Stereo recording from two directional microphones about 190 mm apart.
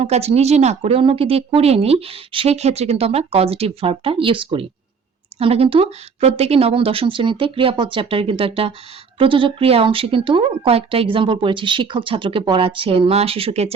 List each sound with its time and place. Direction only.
0.0 s speech: 35° right (ahead or behind)